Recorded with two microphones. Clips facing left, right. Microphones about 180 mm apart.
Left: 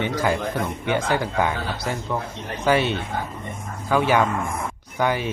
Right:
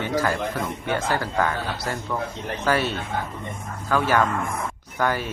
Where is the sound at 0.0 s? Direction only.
15° left (ahead or behind).